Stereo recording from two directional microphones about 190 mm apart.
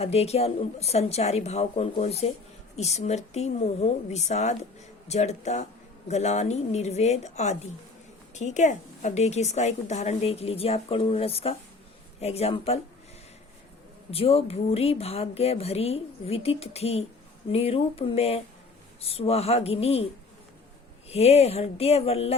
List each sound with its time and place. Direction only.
0.0 s a woman's voice: 35° left (ahead or behind)
14.1 s a woman's voice: 30° left (ahead or behind)
21.1 s a woman's voice: 35° left (ahead or behind)